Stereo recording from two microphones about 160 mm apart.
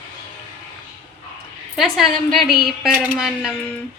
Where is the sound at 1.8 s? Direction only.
Centre (ahead or behind).